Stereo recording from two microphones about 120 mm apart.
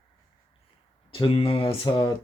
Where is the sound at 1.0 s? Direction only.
45° left (ahead or behind).